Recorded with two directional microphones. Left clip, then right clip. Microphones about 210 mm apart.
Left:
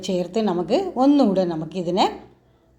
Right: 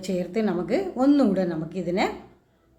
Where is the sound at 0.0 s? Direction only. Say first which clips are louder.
Left 4 dB; 15° left (ahead or behind).